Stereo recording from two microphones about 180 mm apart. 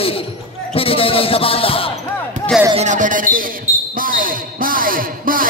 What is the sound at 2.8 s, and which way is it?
Speech, 45° right (ahead or behind).